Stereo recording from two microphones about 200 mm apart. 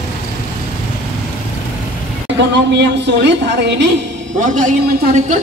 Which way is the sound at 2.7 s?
60° right (ahead or behind).